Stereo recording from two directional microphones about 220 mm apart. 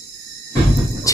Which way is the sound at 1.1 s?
15° left (ahead or behind).